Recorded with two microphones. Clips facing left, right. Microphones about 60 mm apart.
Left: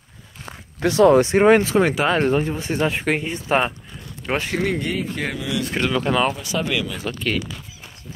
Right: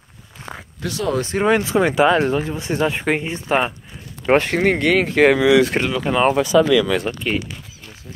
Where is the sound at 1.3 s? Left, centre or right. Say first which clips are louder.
Left 3 dB; centre.